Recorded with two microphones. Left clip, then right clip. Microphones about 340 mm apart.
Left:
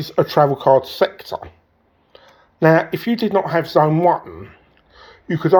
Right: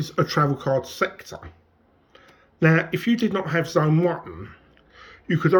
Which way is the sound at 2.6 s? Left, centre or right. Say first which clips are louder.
Left 7 dB; centre.